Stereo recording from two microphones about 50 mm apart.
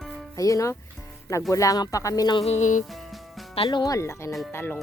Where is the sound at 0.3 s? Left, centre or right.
Left.